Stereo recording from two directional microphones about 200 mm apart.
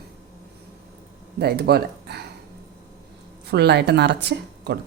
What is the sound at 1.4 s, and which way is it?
Speech, 55° right (ahead or behind).